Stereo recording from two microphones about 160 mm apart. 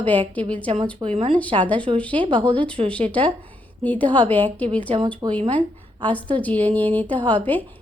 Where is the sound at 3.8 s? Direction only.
10° left (ahead or behind).